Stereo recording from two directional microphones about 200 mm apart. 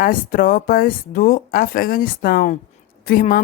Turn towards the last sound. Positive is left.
turn(degrees=45)  # may be behind; listen again after turning